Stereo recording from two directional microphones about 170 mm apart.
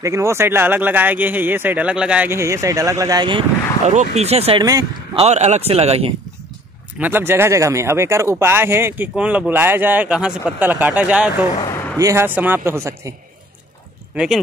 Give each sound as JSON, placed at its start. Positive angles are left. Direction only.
{"t": 0.0, "sound": "speech", "side_deg": -20}
{"t": 3.8, "sound": "speech", "side_deg": -45}
{"t": 7.0, "sound": "speech", "side_deg": -10}
{"t": 11.5, "sound": "a sound", "side_deg": 25}
{"t": 12.0, "sound": "speech", "side_deg": -15}
{"t": 14.1, "sound": "speech", "side_deg": -5}